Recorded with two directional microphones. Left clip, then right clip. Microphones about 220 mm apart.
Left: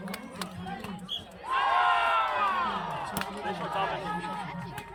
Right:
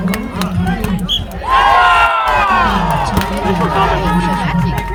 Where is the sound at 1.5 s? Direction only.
50° right (ahead or behind).